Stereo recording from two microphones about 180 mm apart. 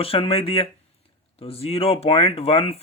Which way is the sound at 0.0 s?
30° left (ahead or behind).